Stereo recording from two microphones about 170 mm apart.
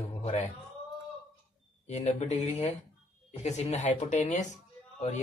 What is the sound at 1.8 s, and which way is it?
Speech, 40° left (ahead or behind).